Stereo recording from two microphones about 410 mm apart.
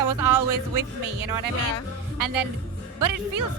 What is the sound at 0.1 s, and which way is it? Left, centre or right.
Speech, right.